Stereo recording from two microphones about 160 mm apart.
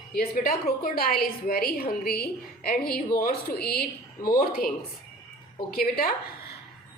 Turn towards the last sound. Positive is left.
turn(degrees=65)  # may be behind; listen again after turning